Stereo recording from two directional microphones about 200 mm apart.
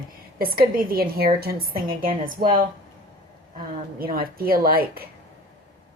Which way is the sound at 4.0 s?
45° right (ahead or behind).